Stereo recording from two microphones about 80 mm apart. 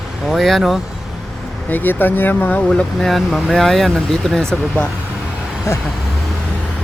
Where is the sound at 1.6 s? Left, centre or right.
Left.